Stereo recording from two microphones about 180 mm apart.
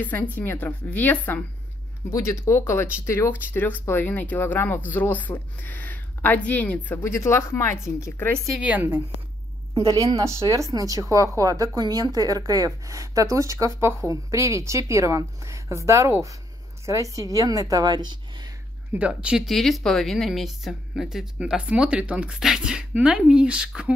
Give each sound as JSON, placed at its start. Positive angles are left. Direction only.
{"t": 0.4, "sound": "speech", "side_deg": 10}
{"t": 8.5, "sound": "a woman's voice", "side_deg": -10}
{"t": 18.9, "sound": "speech", "side_deg": -5}